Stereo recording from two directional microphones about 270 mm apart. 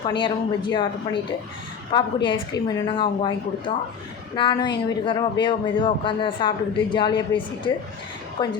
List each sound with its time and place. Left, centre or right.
0.1 s a man's voice: centre